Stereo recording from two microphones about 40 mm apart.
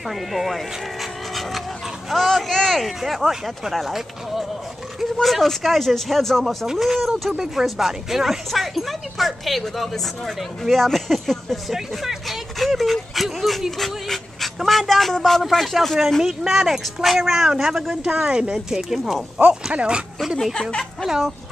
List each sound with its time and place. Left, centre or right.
0.3 s speech: centre
2.0 s speech: centre
6.4 s speech: centre
11.7 s dog: centre
14.7 s speech: centre
18.2 s speech: right
18.8 s speech: centre
19.3 s speech: right